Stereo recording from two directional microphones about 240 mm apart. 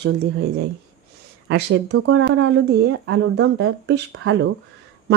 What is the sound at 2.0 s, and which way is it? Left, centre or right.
A woman's voice, right.